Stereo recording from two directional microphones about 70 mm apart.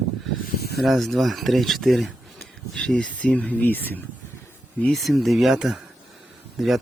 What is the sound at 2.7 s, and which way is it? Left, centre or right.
Speech, centre.